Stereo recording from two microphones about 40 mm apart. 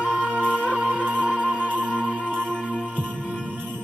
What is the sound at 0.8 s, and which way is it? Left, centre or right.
Music, right.